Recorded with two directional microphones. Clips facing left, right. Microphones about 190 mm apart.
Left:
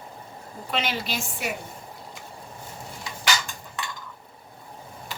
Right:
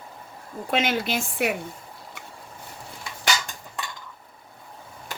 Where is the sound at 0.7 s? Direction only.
50° right (ahead or behind).